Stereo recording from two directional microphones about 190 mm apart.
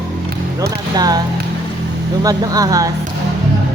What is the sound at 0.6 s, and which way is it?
Music, 20° right (ahead or behind).